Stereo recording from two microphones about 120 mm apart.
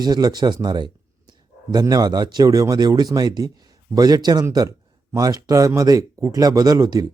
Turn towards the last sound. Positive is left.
turn(degrees=-30)  # may be behind; listen again after turning